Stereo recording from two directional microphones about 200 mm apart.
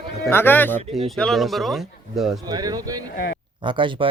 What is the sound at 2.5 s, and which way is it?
Speech, 20° right (ahead or behind).